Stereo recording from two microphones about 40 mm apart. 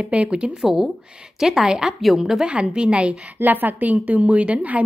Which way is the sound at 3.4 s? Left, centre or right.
Right.